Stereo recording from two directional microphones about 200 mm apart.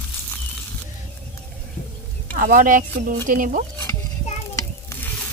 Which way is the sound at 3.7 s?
10° left (ahead or behind).